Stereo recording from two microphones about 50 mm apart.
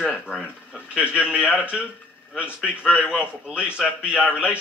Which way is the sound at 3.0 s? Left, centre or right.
Right.